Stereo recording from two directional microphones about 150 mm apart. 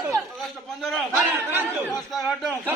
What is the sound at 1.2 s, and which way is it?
Chatter, 10° right (ahead or behind).